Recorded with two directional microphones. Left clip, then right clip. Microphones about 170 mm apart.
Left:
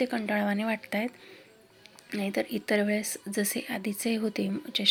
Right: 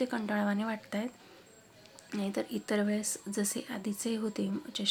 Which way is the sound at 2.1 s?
10° left (ahead or behind).